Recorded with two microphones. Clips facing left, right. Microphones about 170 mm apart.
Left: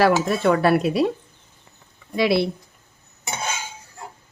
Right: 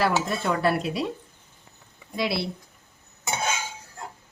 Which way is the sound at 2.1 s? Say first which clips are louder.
Left 8 dB; 65° left (ahead or behind).